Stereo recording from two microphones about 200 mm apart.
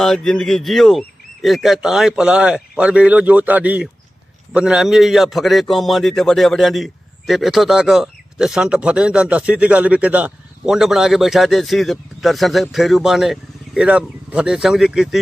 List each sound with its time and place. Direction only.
0.0 s a man's voice: centre (ahead or behind)